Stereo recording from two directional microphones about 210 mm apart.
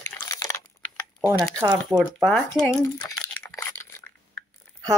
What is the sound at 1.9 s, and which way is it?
Speech, centre (ahead or behind).